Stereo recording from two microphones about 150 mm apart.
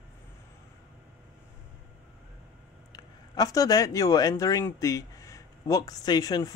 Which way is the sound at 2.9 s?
25° left (ahead or behind).